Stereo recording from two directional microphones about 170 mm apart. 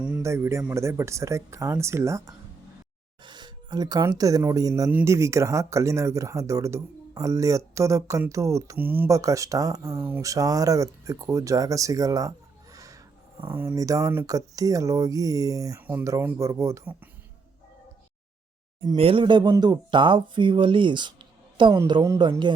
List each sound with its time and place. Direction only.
0.2 s a man's voice: 15° right (ahead or behind)
12.7 s a sound: 20° right (ahead or behind)
13.5 s speech: 15° right (ahead or behind)
18.9 s speech: 30° right (ahead or behind)